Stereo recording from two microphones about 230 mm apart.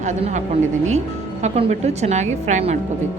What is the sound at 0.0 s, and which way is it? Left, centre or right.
A woman's voice, right.